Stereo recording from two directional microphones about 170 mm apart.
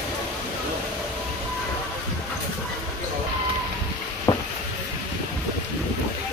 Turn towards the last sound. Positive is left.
turn(degrees=20)  # may be behind; listen again after turning